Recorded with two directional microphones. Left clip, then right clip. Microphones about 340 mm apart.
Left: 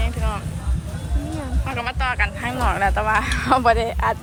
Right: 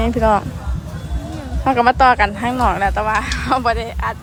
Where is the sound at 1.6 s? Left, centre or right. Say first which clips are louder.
Right 14 dB; centre.